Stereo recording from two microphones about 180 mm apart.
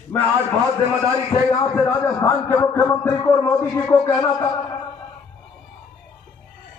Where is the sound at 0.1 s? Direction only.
10° left (ahead or behind).